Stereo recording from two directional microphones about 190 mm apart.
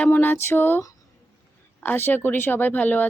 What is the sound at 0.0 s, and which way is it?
Speech, 10° left (ahead or behind).